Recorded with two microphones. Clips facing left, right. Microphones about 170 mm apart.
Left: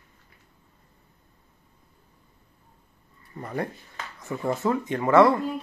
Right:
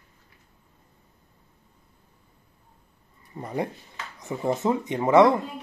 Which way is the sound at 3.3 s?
15° right (ahead or behind).